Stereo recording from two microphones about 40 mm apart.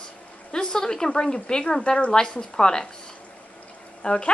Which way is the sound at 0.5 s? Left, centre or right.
Centre.